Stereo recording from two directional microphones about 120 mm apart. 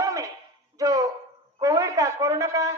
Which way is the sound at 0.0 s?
30° right (ahead or behind).